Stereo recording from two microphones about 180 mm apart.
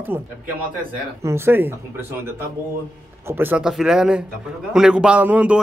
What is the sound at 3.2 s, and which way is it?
Speech, 10° right (ahead or behind).